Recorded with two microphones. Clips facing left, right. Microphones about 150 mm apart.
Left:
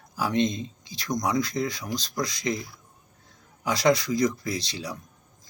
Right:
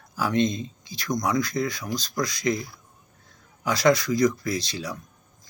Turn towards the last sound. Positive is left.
turn(degrees=25)  # may be behind; listen again after turning